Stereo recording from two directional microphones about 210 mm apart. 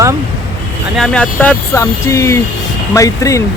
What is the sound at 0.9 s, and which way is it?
Speech, 5° left (ahead or behind).